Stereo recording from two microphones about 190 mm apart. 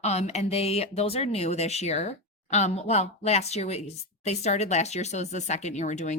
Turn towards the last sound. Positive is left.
turn(degrees=40)  # may be behind; listen again after turning